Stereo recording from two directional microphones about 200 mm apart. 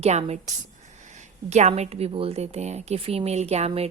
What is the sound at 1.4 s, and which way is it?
A woman's voice, 35° right (ahead or behind).